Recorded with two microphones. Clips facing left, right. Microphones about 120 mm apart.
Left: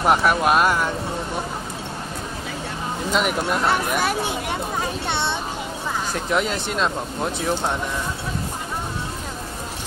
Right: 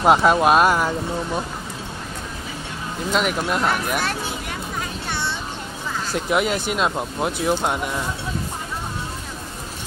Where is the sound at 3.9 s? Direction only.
10° left (ahead or behind).